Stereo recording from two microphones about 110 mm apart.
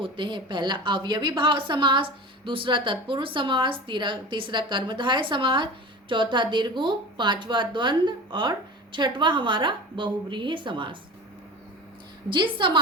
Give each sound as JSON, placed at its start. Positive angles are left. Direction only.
{"t": 0.0, "sound": "a woman's voice", "side_deg": -45}
{"t": 12.3, "sound": "a woman's voice", "side_deg": -45}